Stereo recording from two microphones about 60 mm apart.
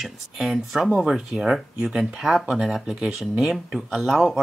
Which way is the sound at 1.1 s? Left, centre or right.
Centre.